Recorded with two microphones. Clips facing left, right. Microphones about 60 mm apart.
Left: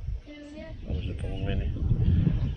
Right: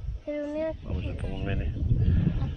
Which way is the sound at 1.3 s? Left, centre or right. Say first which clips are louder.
Even; right.